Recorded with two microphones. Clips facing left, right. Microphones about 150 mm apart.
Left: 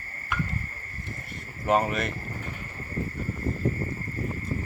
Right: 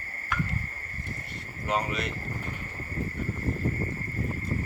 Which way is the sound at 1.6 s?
50° left (ahead or behind).